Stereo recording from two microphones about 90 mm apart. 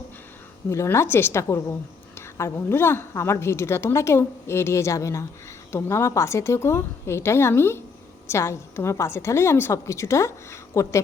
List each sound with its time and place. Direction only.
0.7 s a woman's voice: 30° left (ahead or behind)